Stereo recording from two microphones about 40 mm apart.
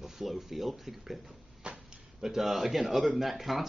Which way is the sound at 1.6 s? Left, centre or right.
Right.